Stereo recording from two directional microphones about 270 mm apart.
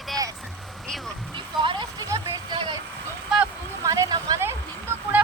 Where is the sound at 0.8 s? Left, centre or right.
Centre.